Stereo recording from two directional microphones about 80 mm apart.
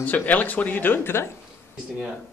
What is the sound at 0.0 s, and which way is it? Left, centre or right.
A man's voice, left.